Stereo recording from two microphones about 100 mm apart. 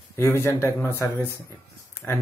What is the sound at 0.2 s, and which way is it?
Speech, 25° left (ahead or behind).